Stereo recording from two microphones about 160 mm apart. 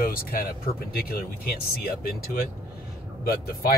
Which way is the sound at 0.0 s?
65° left (ahead or behind).